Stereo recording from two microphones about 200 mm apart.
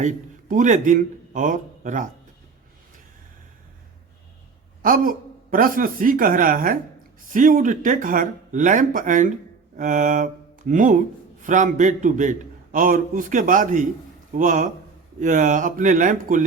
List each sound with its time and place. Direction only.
0.0 s a man's voice: 40° right (ahead or behind)
4.8 s a man's voice: 45° right (ahead or behind)